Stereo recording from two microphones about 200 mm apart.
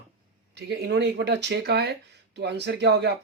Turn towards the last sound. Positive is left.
turn(degrees=-55)  # may be behind; listen again after turning